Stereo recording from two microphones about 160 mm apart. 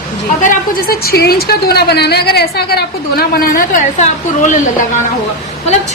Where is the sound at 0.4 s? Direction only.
70° left (ahead or behind); by 4.6 s 50° left (ahead or behind).